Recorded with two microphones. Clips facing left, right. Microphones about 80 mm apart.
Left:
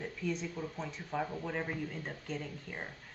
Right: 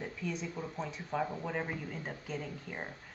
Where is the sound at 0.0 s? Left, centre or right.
Centre.